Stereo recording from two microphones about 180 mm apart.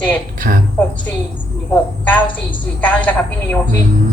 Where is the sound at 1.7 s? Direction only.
10° left (ahead or behind).